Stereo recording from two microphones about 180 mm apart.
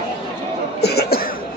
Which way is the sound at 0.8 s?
60° left (ahead or behind).